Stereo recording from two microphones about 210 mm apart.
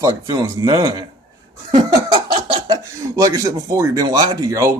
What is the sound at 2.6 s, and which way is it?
Speech, 15° right (ahead or behind).